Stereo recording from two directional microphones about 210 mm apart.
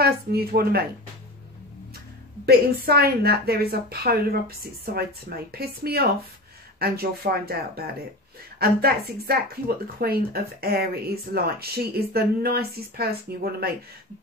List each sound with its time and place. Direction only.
0.0 s a woman's voice: 50° right (ahead or behind)
2.4 s a woman's voice: 50° right (ahead or behind)